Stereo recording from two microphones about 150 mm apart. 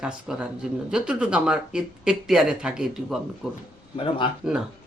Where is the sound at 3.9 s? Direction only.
35° left (ahead or behind).